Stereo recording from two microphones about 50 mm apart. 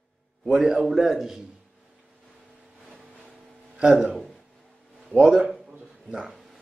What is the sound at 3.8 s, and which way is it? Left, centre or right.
A man's voice, right.